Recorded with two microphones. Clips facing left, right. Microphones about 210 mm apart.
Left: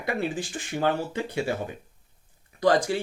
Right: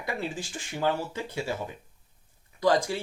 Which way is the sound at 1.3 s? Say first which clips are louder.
Left 4 dB; 60° left (ahead or behind).